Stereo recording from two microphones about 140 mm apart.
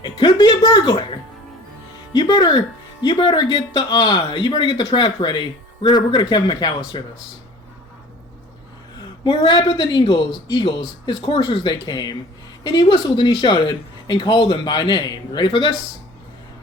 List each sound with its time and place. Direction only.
0.0 s music: 35° left (ahead or behind)
2.1 s speech: 30° left (ahead or behind)
9.2 s speech: 35° left (ahead or behind)